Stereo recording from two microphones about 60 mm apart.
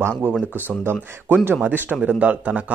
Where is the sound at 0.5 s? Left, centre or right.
Right.